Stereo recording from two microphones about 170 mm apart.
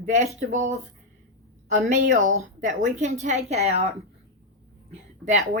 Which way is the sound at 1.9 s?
45° right (ahead or behind).